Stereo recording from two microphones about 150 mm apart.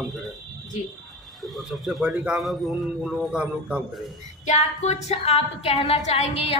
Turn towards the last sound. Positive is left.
turn(degrees=40)  # may be behind; listen again after turning